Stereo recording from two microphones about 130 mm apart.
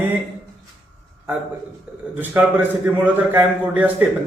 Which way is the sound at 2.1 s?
15° right (ahead or behind).